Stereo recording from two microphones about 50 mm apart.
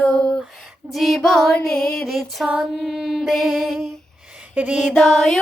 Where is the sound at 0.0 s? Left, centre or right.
Left.